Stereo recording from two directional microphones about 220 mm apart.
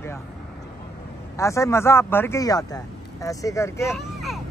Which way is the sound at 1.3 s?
15° left (ahead or behind).